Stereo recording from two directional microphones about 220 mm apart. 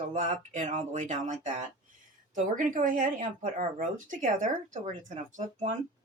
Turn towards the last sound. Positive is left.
turn(degrees=-35)  # may be behind; listen again after turning